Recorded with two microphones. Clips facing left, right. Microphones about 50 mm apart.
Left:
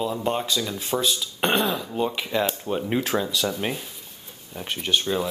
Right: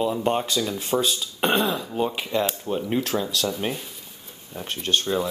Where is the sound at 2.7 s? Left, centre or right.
Centre.